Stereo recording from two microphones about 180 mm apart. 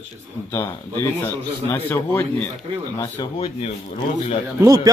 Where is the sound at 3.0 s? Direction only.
20° left (ahead or behind).